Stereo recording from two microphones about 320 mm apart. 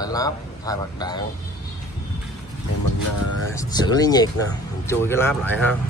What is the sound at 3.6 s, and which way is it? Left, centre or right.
A man's voice, centre.